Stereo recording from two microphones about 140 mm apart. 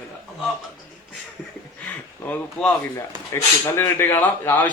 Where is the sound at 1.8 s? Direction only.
10° left (ahead or behind).